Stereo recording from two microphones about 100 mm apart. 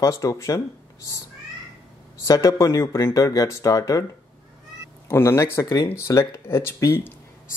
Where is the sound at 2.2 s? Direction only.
35° left (ahead or behind).